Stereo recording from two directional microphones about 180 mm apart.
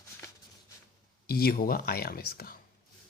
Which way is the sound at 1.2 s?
60° left (ahead or behind).